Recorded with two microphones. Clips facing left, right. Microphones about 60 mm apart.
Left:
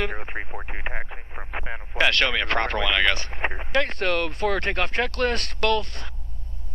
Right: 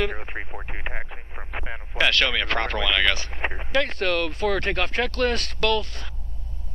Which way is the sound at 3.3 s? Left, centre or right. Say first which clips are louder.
Left 1 dB; centre.